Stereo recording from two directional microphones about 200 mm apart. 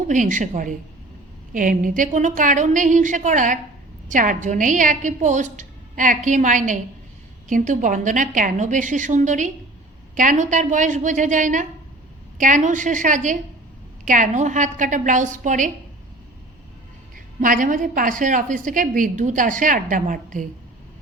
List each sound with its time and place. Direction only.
0.1 s a woman's voice: 40° right (ahead or behind)
17.4 s a woman's voice: 40° right (ahead or behind)